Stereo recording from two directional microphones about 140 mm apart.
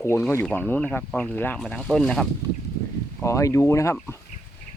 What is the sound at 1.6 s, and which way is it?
Speech, centre (ahead or behind).